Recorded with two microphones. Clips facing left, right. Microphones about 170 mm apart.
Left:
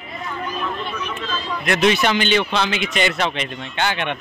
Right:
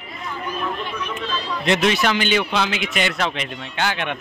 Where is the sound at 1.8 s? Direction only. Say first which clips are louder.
Left 2 dB; centre (ahead or behind).